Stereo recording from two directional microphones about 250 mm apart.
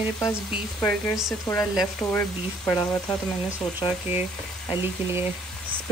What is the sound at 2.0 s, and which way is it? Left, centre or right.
Speech, centre.